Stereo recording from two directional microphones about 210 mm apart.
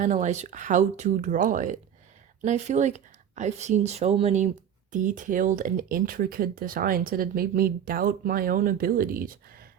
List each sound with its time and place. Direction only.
0.0 s speech: 35° right (ahead or behind)